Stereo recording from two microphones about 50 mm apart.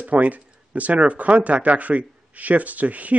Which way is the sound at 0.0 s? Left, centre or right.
Right.